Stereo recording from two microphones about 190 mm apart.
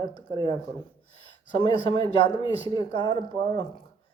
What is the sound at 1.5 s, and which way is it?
A man's voice, 25° left (ahead or behind).